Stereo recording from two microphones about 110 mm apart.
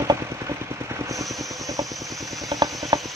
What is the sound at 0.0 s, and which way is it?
Vehicle, 30° right (ahead or behind).